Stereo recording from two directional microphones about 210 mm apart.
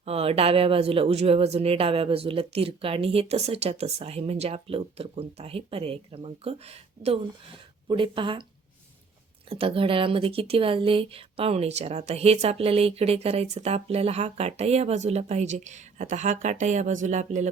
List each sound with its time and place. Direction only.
0.0 s speech: 30° right (ahead or behind)
9.5 s speech: 25° right (ahead or behind)